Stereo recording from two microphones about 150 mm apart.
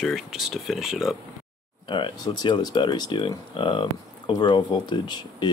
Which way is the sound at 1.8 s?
30° left (ahead or behind).